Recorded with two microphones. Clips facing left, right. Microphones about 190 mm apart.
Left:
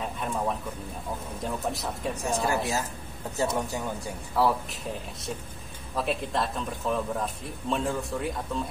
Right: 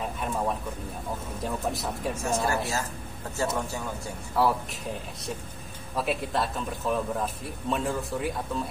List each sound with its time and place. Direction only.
0.0 s a sound: centre (ahead or behind)
1.4 s speech: centre (ahead or behind)
3.3 s speech: 15° left (ahead or behind)
4.4 s speech: centre (ahead or behind)
5.9 s speech: centre (ahead or behind)